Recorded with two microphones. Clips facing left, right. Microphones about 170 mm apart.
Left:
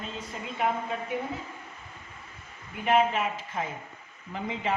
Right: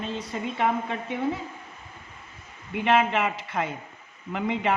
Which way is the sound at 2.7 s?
80° right.